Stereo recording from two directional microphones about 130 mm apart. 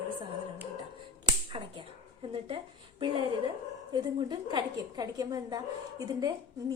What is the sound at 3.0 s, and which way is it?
A woman's voice, 40° right (ahead or behind).